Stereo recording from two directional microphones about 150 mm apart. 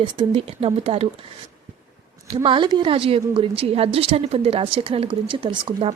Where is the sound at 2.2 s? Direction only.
35° right (ahead or behind).